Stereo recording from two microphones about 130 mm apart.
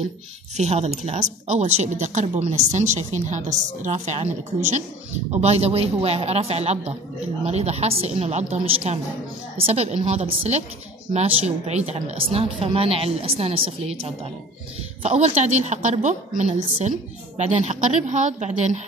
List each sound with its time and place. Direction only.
0.6 s a woman's voice: 55° right (ahead or behind)